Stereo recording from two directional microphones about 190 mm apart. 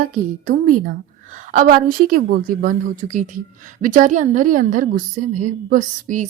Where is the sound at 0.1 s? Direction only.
45° right (ahead or behind).